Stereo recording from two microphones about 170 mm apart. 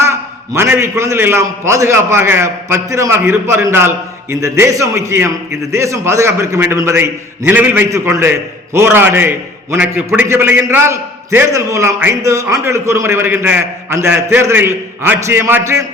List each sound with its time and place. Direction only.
0.0 s a man's voice: 15° right (ahead or behind)